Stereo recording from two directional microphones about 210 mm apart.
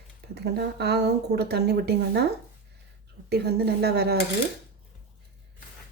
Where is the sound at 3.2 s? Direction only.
50° right (ahead or behind).